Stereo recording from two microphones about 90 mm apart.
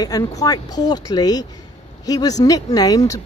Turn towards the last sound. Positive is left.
turn(degrees=40)  # may be behind; listen again after turning